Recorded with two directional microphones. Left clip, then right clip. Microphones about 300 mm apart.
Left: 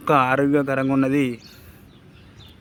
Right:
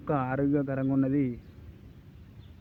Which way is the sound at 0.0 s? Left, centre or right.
Centre.